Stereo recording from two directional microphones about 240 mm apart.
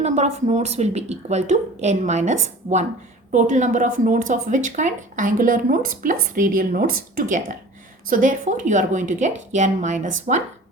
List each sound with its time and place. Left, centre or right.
0.0 s a woman's voice: right